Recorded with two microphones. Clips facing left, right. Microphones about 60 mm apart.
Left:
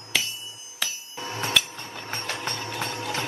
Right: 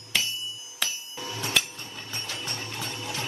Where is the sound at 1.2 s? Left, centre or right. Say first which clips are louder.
Left 4 dB; left.